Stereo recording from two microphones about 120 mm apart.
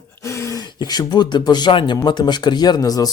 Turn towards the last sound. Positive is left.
turn(degrees=30)  # may be behind; listen again after turning